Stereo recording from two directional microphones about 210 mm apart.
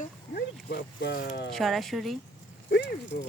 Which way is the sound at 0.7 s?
50° left (ahead or behind).